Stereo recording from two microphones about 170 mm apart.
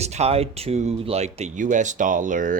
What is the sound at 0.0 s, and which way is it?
Speech, 40° right (ahead or behind).